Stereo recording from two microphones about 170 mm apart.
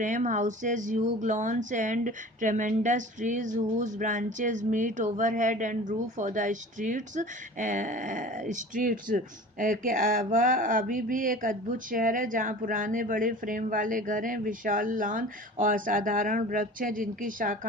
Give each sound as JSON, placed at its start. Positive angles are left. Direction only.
{"t": 0.0, "sound": "speech", "side_deg": -50}